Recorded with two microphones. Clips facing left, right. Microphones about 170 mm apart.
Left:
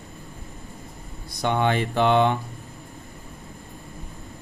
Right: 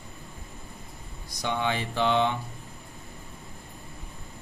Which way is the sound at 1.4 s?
55° left (ahead or behind).